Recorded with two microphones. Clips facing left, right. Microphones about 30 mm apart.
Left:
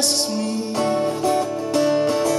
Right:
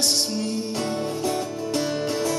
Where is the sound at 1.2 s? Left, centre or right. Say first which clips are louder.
Left 6 dB; centre.